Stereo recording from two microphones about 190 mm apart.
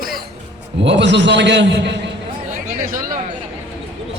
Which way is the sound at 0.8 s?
65° right (ahead or behind).